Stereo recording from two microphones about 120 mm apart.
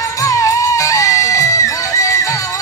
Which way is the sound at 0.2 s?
25° left (ahead or behind).